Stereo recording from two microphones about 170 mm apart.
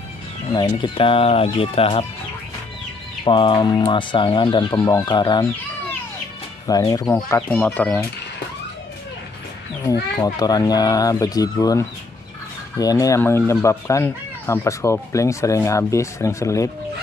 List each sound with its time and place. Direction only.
0.6 s speech: 25° left (ahead or behind)
3.3 s speech: 30° left (ahead or behind)
6.7 s speech: 20° left (ahead or behind)
10.2 s speech: 20° left (ahead or behind)